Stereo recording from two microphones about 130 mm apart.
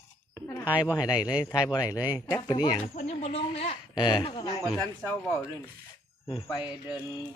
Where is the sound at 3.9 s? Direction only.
35° left (ahead or behind).